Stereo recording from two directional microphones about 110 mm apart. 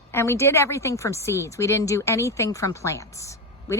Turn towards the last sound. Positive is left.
turn(degrees=30)  # may be behind; listen again after turning